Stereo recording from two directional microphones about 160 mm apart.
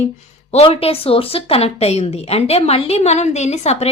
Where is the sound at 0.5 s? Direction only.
40° left (ahead or behind).